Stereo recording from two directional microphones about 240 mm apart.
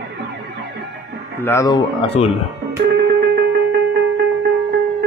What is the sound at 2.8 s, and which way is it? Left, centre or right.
Music, right.